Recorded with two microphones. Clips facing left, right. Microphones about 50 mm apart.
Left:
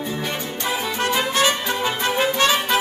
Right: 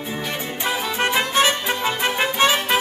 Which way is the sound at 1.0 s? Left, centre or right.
Right.